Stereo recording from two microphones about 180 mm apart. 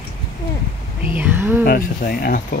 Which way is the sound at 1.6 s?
55° left (ahead or behind).